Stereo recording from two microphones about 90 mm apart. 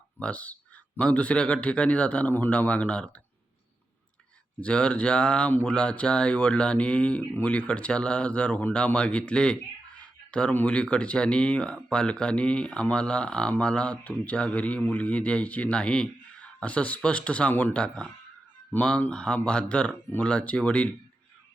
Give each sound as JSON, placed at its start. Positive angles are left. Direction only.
{"t": 0.2, "sound": "speech", "side_deg": 15}
{"t": 4.6, "sound": "speech", "side_deg": 10}